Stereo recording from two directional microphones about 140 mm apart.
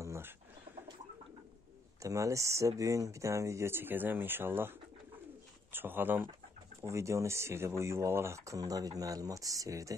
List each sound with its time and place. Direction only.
0.0 s pigeon: 20° right (ahead or behind)
2.0 s speech: 20° right (ahead or behind)